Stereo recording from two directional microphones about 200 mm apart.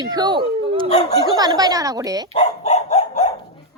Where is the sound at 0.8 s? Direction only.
30° left (ahead or behind).